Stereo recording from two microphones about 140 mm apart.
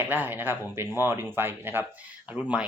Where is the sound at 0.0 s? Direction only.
15° right (ahead or behind).